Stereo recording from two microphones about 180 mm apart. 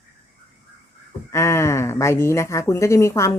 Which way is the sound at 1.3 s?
15° left (ahead or behind).